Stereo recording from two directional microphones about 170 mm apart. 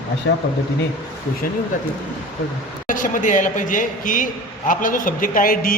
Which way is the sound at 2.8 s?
50° left (ahead or behind).